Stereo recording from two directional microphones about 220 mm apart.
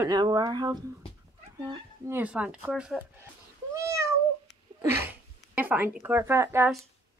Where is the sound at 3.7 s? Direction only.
10° right (ahead or behind).